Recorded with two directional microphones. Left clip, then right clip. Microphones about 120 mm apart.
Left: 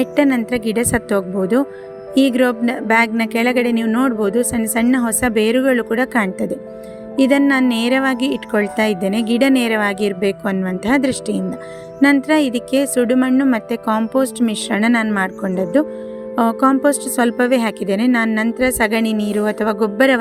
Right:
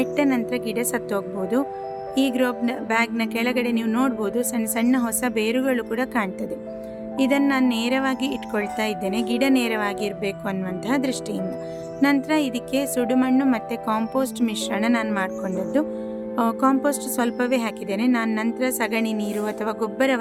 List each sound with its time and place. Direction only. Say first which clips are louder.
0.0 s a woman's voice: left 6 dB; 50° left (ahead or behind)